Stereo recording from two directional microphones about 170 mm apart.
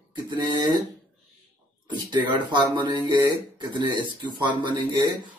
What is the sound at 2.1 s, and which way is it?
Speech, 25° right (ahead or behind).